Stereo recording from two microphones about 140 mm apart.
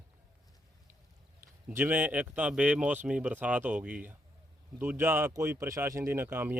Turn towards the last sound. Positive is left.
turn(degrees=-15)  # may be behind; listen again after turning